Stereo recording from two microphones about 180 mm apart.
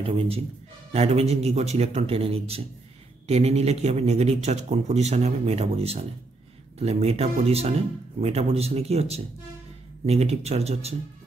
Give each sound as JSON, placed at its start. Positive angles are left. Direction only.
{"t": 0.0, "sound": "speech", "side_deg": -30}